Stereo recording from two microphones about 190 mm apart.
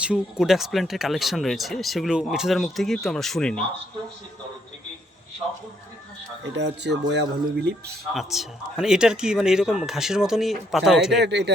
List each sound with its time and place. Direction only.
0.0 s speech: 5° right (ahead or behind)
6.9 s speech: 65° right (ahead or behind)
8.1 s speech: centre (ahead or behind)
11.2 s speech: 65° right (ahead or behind)